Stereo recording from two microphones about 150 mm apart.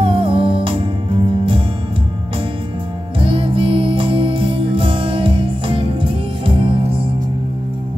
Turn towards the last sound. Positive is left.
turn(degrees=-35)  # may be behind; listen again after turning